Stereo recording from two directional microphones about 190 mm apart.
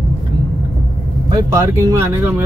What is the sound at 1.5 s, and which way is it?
Speech, 15° right (ahead or behind).